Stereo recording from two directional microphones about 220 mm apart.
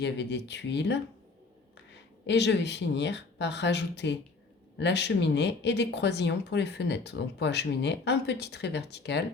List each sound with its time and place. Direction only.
0.0 s speech: 50° left (ahead or behind)
2.2 s speech: 50° left (ahead or behind)